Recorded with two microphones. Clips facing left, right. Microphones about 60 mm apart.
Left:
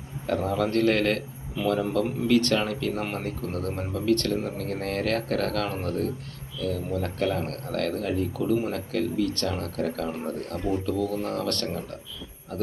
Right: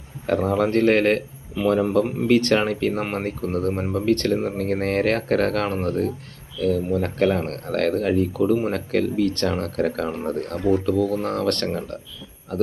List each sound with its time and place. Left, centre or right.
0.3 s a man's voice: right